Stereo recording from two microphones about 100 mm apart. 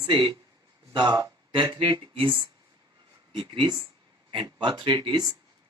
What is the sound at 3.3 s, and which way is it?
Speech, 60° right (ahead or behind).